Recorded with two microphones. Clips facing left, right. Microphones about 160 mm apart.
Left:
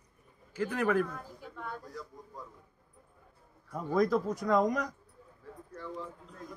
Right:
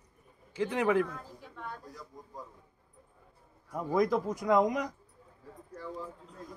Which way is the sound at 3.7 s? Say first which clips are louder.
Even; 15° right (ahead or behind).